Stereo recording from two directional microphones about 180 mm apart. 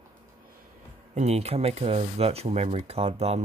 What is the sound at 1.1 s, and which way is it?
Speech, 35° right (ahead or behind).